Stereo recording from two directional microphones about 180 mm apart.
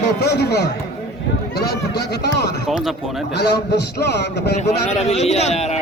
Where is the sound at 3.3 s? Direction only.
70° left (ahead or behind).